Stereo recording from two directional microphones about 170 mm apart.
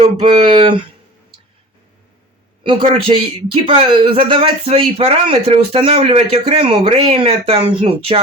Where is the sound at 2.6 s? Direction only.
30° right (ahead or behind).